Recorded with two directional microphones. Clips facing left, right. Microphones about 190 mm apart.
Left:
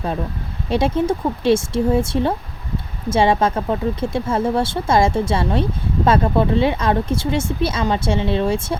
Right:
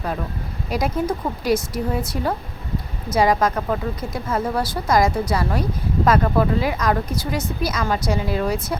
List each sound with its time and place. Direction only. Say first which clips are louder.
0.7 s speech: left 4 dB; 25° left (ahead or behind)